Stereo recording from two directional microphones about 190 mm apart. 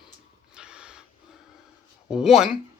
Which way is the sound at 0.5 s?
5° right (ahead or behind).